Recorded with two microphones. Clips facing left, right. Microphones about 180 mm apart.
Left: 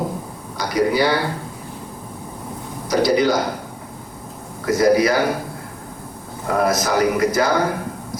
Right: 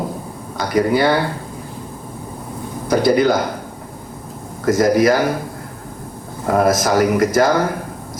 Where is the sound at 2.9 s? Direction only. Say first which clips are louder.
Right 2 dB; 50° right (ahead or behind).